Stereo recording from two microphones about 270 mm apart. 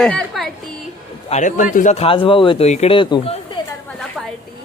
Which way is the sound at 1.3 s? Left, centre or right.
Left.